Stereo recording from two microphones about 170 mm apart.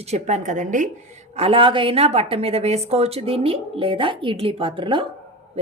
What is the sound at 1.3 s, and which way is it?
A woman's voice, 35° right (ahead or behind).